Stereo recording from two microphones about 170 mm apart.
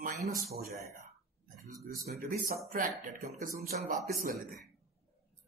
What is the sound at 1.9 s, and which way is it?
Speech, 60° right (ahead or behind).